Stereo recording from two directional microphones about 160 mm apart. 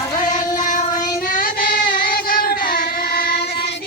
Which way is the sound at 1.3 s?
60° left (ahead or behind).